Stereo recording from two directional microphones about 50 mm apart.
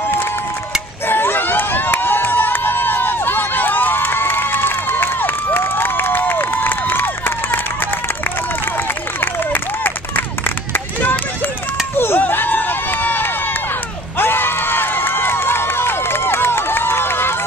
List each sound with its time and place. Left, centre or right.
1.0 s run: left
9.2 s a sound: left
12.0 s run: left
14.1 s crowd: left